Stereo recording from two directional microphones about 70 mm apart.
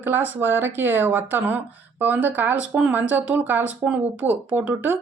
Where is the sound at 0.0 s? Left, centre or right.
Right.